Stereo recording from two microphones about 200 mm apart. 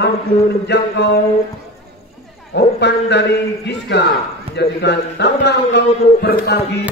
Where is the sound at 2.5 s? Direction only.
60° left (ahead or behind).